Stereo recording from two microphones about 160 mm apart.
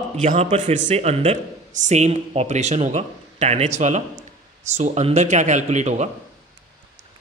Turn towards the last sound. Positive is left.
turn(degrees=-45)  # may be behind; listen again after turning